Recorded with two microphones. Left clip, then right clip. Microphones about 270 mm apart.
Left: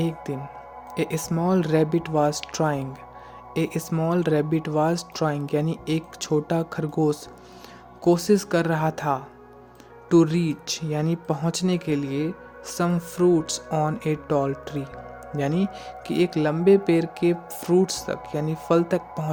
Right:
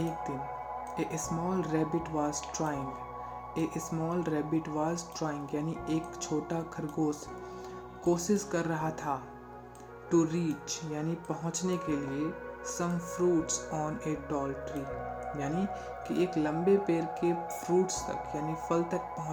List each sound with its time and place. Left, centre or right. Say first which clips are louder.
0.0 s speech: left 5 dB; left